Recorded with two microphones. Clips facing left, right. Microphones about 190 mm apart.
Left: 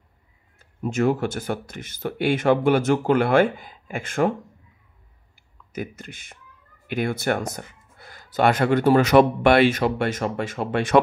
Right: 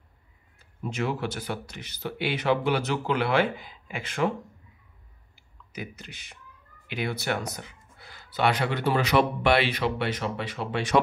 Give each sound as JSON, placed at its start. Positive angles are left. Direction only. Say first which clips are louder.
{"t": 0.6, "sound": "speech", "louder": "left 7 dB", "side_deg": 45}
{"t": 5.7, "sound": "speech", "louder": "left 7 dB", "side_deg": 50}